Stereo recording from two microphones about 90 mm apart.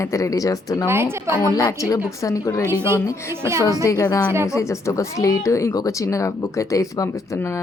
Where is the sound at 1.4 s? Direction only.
40° left (ahead or behind).